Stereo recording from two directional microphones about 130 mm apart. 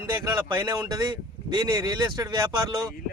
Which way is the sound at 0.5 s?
35° right (ahead or behind).